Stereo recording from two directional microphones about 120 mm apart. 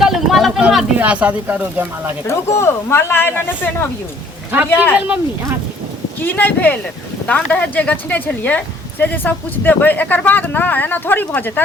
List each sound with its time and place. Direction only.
0.0 s speech: centre (ahead or behind)
2.2 s speech: 20° left (ahead or behind)
4.9 s speech: 10° right (ahead or behind)
6.2 s speech: 15° left (ahead or behind)